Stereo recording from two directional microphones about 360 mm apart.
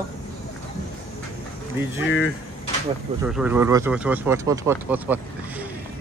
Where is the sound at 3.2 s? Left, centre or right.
Centre.